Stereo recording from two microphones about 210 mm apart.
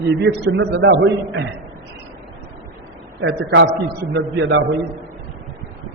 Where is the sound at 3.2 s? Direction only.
60° right (ahead or behind).